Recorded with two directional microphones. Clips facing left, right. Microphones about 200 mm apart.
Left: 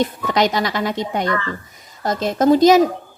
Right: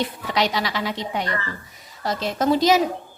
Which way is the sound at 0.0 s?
45° left (ahead or behind).